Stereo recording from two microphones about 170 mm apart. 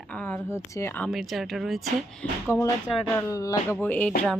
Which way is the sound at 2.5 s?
15° left (ahead or behind).